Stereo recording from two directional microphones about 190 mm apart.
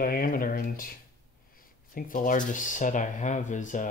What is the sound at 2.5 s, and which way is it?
Speech, 45° left (ahead or behind).